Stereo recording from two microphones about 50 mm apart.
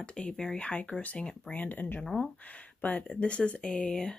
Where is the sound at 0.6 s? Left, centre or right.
Left.